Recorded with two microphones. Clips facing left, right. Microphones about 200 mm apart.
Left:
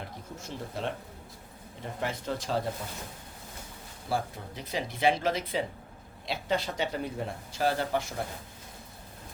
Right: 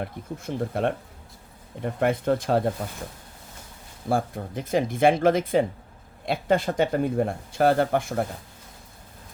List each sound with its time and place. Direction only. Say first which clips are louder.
0.0 s speech: right 9 dB; 55° right (ahead or behind)
4.1 s speech: right 7 dB; 50° right (ahead or behind)